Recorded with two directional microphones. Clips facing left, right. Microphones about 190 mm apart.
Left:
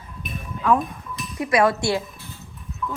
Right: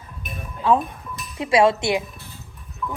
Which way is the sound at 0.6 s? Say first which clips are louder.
Right 1 dB; 30° right (ahead or behind).